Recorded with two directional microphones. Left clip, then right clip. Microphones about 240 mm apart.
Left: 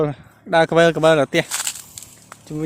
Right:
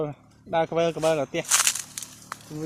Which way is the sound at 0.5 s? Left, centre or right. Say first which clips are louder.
Left 9 dB; left.